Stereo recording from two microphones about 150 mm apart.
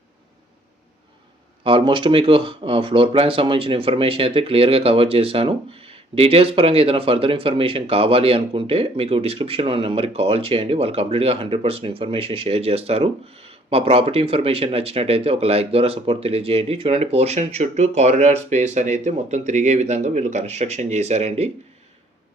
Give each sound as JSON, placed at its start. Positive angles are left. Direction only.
{"t": 1.6, "sound": "speech", "side_deg": -35}